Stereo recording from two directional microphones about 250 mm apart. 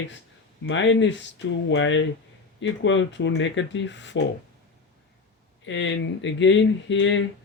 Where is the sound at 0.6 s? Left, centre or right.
Left.